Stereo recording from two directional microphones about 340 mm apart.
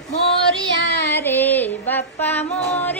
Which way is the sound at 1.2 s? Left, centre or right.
Centre.